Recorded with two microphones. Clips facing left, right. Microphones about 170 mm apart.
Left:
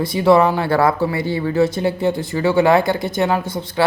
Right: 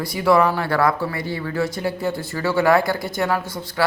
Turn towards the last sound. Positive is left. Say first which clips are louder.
# left 4 dB
turn(degrees=20)  # may be behind; listen again after turning